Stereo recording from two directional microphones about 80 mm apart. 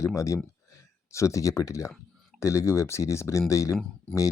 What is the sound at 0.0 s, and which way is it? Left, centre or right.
Speech, left.